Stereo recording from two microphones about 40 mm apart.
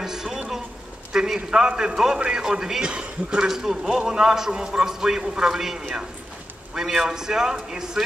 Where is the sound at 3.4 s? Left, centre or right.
Centre.